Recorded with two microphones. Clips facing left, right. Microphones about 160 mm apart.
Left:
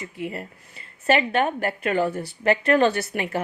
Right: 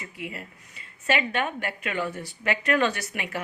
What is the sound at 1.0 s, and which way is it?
A woman's voice, 35° left (ahead or behind).